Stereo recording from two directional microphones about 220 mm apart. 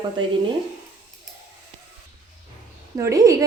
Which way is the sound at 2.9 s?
15° right (ahead or behind).